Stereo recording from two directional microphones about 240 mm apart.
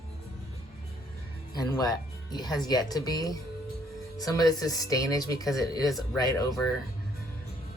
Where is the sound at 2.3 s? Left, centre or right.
Centre.